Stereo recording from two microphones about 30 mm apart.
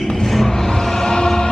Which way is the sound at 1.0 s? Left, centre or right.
Left.